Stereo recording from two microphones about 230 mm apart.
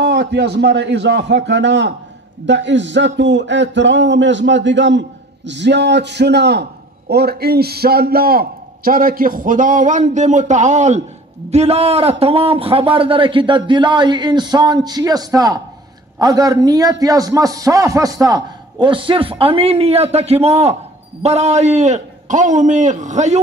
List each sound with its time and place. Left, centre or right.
0.0 s a man's voice: right